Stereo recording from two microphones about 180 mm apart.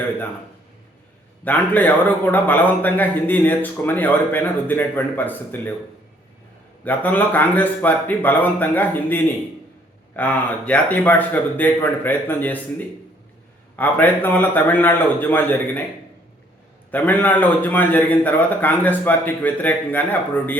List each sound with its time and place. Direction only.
1.5 s a man's voice: 10° left (ahead or behind)
6.8 s a man's voice: 10° left (ahead or behind)
13.7 s a man's voice: 10° left (ahead or behind)
16.9 s a man's voice: 10° left (ahead or behind)